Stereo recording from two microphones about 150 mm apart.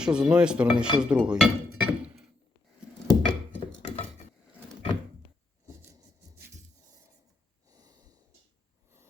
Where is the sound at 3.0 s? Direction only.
25° left (ahead or behind).